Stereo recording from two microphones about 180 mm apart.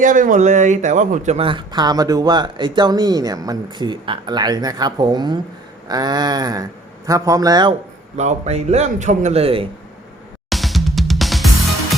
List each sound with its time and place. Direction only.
0.0 s speech: 45° right (ahead or behind); by 7.8 s 25° right (ahead or behind)
8.1 s a man's voice: 40° right (ahead or behind)
10.5 s drum kit: centre (ahead or behind)